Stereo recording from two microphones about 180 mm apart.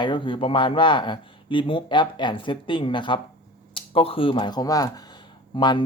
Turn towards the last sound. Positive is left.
turn(degrees=25)  # may be behind; listen again after turning